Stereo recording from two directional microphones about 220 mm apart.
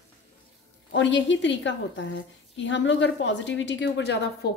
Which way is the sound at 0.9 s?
55° left (ahead or behind).